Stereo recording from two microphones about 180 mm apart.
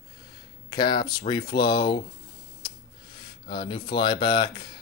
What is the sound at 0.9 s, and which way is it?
Speech, 55° left (ahead or behind).